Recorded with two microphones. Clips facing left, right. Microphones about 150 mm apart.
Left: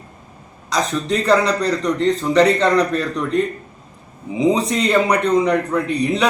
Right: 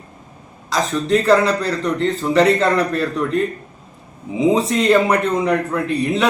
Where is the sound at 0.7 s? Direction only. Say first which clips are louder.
Right 2 dB; centre (ahead or behind).